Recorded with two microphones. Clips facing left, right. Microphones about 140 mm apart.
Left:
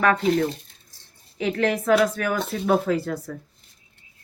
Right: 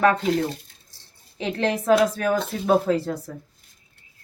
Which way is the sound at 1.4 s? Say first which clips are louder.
Left 1 dB; 30° right (ahead or behind).